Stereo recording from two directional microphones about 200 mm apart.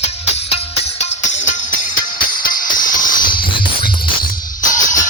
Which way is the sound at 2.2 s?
45° left (ahead or behind).